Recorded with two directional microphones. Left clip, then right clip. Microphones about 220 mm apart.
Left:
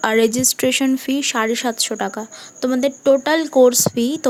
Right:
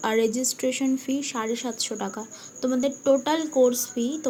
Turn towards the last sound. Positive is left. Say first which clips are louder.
# left 10 dB
turn(degrees=50)  # may be behind; listen again after turning